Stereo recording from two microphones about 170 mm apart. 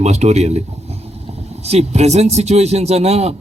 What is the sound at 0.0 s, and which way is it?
Speech, 40° right (ahead or behind).